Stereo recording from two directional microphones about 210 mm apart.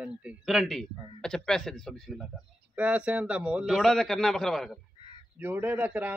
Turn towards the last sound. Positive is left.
turn(degrees=-5)  # may be behind; listen again after turning